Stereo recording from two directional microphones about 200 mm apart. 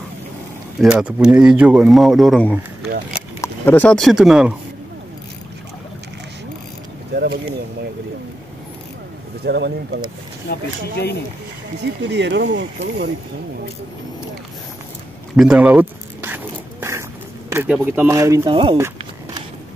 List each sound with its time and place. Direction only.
0.7 s speech: 5° right (ahead or behind)
7.1 s a sound: 55° right (ahead or behind)
9.4 s speech: 55° right (ahead or behind)
10.5 s speech: 55° left (ahead or behind)
11.8 s speech: 60° right (ahead or behind)
15.3 s zipper: 5° right (ahead or behind)
17.5 s speech: 10° right (ahead or behind); by 18.8 s 25° right (ahead or behind)